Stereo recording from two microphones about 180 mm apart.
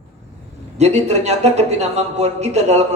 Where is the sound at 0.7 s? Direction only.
35° right (ahead or behind).